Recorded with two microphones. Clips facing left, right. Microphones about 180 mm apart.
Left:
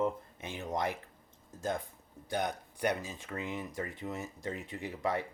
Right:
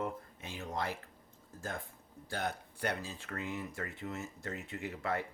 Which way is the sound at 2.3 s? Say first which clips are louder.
Left 4 dB; 15° left (ahead or behind).